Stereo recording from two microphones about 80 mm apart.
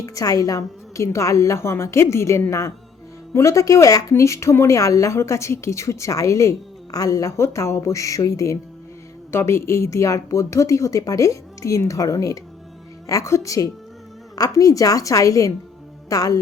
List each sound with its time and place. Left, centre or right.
0.0 s a woman's voice: left